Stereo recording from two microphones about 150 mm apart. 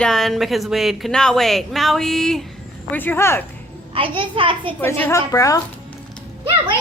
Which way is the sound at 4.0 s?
35° right (ahead or behind).